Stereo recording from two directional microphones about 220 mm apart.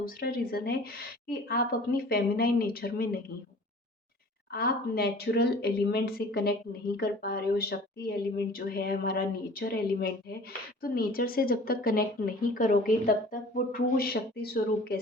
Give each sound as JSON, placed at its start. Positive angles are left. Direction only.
{"t": 0.0, "sound": "speech", "side_deg": 45}
{"t": 4.5, "sound": "speech", "side_deg": 45}